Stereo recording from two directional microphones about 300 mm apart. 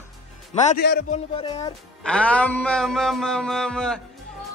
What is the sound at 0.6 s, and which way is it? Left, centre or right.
Speech, left.